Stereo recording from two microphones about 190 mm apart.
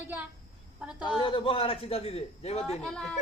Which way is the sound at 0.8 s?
5° right (ahead or behind).